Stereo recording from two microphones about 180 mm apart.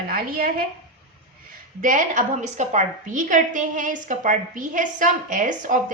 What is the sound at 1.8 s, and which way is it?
A woman's voice, 45° right (ahead or behind).